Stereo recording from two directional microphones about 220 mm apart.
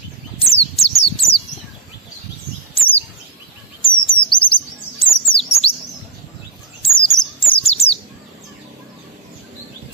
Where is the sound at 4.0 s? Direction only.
20° left (ahead or behind).